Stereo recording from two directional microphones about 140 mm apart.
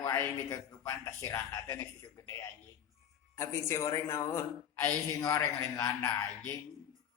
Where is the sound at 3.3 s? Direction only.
20° left (ahead or behind).